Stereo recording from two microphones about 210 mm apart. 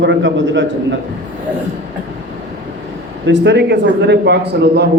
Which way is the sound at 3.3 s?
55° right (ahead or behind).